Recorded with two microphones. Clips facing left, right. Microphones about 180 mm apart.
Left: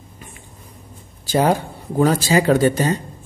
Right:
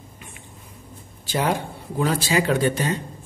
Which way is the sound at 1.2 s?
40° left (ahead or behind).